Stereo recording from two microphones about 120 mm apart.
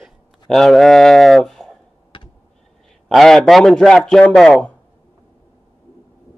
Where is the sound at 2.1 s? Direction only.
45° left (ahead or behind).